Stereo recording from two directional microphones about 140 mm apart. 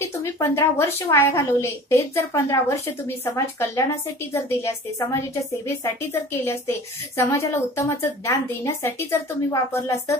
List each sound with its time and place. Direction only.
0.2 s a woman's voice: 20° left (ahead or behind)
6.4 s a woman's voice: 20° left (ahead or behind)